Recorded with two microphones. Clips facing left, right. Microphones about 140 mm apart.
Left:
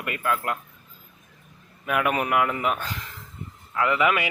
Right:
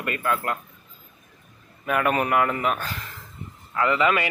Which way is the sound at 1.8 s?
5° left (ahead or behind).